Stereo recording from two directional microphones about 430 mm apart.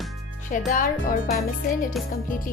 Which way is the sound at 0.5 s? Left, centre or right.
Centre.